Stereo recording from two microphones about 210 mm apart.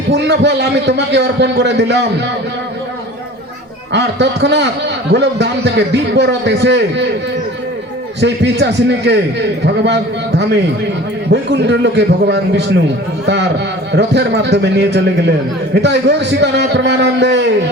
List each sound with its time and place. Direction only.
0.1 s a man's voice: 55° right (ahead or behind)
3.9 s a man's voice: 55° right (ahead or behind)
8.2 s a man's voice: 55° right (ahead or behind)